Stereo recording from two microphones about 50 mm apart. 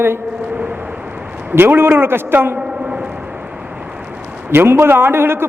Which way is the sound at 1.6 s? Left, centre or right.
Right.